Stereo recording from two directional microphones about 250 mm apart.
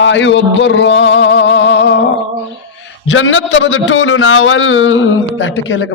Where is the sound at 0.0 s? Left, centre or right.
Left.